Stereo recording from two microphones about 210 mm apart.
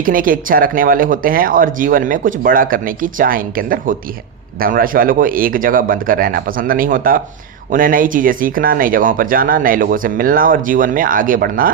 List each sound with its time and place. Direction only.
0.0 s speech: 40° right (ahead or behind)